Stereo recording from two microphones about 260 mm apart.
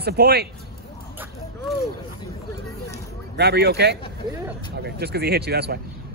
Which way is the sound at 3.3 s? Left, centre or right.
Right.